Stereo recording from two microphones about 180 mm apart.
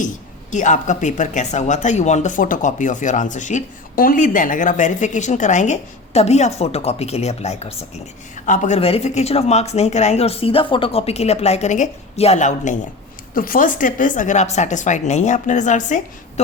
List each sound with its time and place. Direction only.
0.5 s speech: 45° left (ahead or behind)